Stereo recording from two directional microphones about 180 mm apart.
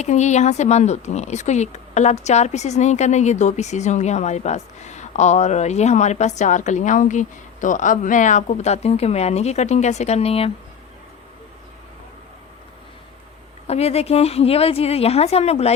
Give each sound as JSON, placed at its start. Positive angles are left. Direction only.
{"t": 0.0, "sound": "speech", "side_deg": 40}
{"t": 13.7, "sound": "speech", "side_deg": 35}